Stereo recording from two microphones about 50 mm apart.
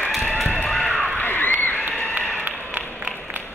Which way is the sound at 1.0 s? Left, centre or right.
Left.